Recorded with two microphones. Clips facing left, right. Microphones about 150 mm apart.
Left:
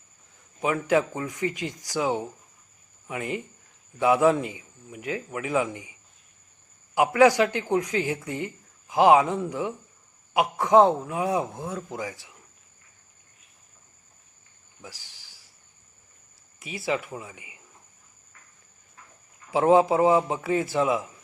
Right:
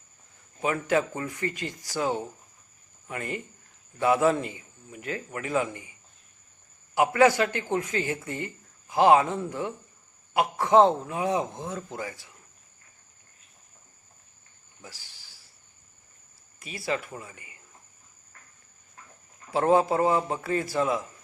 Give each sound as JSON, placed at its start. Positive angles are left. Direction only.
{"t": 0.6, "sound": "a man's voice", "side_deg": 10}
{"t": 1.2, "sound": "speech", "side_deg": 0}
{"t": 1.5, "sound": "a man's voice", "side_deg": 15}
{"t": 6.9, "sound": "a man's voice", "side_deg": 10}
{"t": 14.8, "sound": "speech", "side_deg": 15}
{"t": 16.6, "sound": "a man's voice", "side_deg": 15}
{"t": 19.5, "sound": "a man's voice", "side_deg": 10}